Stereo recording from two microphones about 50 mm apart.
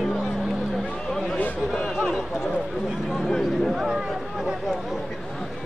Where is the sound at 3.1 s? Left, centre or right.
Centre.